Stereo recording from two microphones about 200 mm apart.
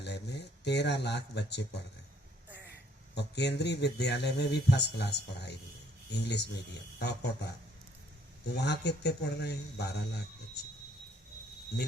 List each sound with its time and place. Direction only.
0.0 s speech: 60° left (ahead or behind)
3.2 s speech: 60° left (ahead or behind)
8.5 s speech: 60° left (ahead or behind)